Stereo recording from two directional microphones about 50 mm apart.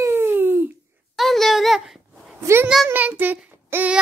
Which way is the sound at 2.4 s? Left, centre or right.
Right.